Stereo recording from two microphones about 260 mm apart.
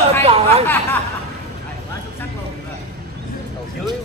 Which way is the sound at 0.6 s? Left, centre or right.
Centre.